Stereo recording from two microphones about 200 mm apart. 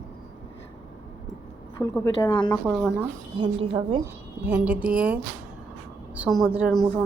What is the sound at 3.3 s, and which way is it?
Speech, 25° right (ahead or behind).